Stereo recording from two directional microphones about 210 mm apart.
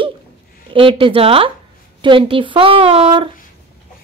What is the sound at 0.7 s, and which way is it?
Speech, 25° right (ahead or behind).